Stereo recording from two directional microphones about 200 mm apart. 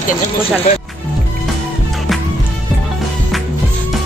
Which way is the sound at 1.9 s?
Centre (ahead or behind).